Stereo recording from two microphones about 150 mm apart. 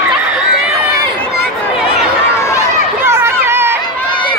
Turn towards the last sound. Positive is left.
turn(degrees=-15)  # may be behind; listen again after turning